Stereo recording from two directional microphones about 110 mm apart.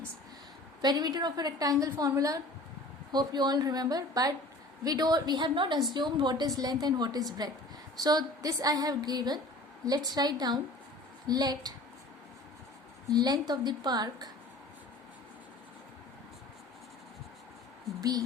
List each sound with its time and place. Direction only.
0.8 s a woman's voice: 40° right (ahead or behind)
13.1 s a woman's voice: 40° right (ahead or behind)